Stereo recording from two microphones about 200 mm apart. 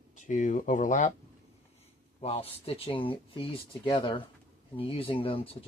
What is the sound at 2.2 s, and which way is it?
Speech, 30° left (ahead or behind).